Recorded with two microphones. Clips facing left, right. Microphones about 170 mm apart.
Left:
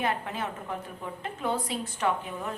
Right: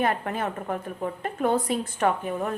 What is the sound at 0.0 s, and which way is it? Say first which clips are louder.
A woman's voice: right 5 dB; 55° right (ahead or behind).